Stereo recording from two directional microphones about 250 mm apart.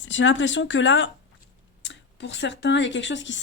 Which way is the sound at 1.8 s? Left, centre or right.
Left.